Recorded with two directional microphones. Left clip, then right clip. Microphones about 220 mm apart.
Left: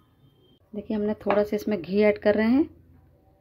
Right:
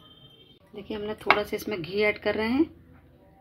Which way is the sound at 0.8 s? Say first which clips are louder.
Left 5 dB; 50° left (ahead or behind).